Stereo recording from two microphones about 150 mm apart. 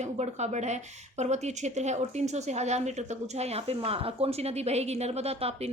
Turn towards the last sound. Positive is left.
turn(degrees=-40)  # may be behind; listen again after turning